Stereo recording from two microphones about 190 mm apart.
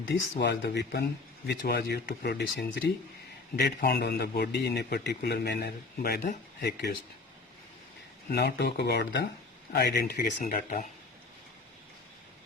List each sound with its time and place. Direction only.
0.0 s a man's voice: 70° left (ahead or behind)
8.3 s a man's voice: 60° left (ahead or behind); by 10.8 s 40° left (ahead or behind)